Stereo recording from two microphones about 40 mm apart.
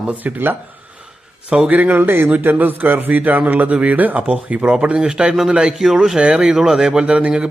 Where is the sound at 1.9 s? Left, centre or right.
Right.